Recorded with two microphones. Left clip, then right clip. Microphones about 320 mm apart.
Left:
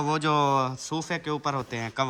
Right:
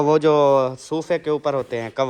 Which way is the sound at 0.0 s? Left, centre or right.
Centre.